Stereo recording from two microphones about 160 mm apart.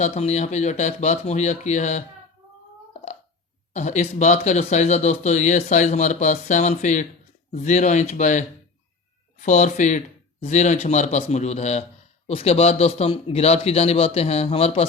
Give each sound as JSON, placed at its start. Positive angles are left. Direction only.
{"t": 0.0, "sound": "speech", "side_deg": 45}
{"t": 3.7, "sound": "a man's voice", "side_deg": 45}